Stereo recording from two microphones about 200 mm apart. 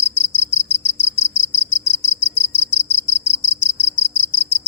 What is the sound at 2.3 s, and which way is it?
Cricket, 5° right (ahead or behind).